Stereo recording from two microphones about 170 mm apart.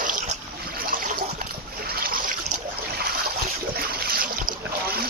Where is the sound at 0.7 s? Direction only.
55° right (ahead or behind).